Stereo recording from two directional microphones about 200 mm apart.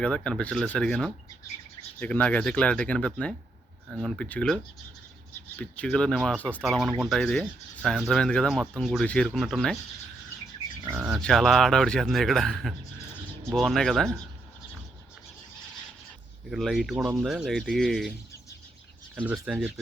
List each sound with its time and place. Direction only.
0.0 s speech: 5° left (ahead or behind)
10.8 s speech: 5° right (ahead or behind)
16.5 s speech: centre (ahead or behind)
19.1 s speech: 5° right (ahead or behind)